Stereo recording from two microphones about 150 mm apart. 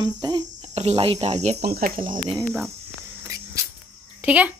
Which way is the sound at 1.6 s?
85° right.